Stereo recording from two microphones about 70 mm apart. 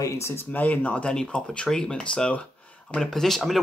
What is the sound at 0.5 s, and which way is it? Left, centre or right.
Speech, left.